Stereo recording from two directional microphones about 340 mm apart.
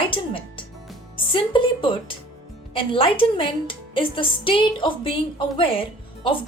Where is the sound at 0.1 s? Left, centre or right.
Centre.